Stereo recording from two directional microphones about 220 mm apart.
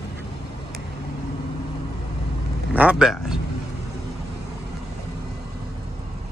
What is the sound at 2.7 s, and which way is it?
Speech, 5° right (ahead or behind).